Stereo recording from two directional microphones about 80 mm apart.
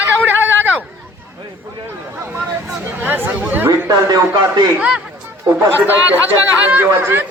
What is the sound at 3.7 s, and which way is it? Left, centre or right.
Speech, right.